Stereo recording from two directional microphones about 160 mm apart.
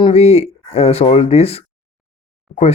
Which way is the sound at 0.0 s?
40° left (ahead or behind).